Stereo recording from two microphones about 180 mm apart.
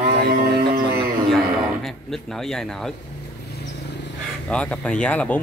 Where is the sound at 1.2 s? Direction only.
Centre (ahead or behind).